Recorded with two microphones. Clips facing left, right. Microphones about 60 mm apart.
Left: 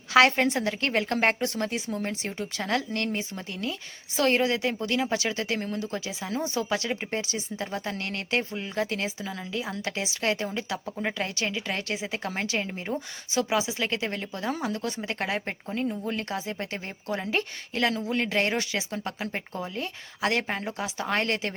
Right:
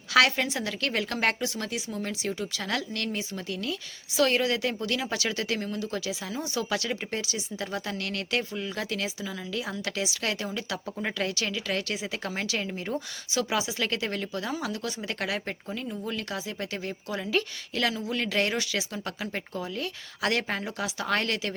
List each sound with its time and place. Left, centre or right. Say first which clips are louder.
0.1 s a woman's voice: left 3 dB; left
10.8 s speech: left 2 dB; centre
11.2 s speech: even; left